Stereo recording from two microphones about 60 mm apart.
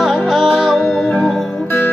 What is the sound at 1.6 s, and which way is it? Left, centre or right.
Music, left.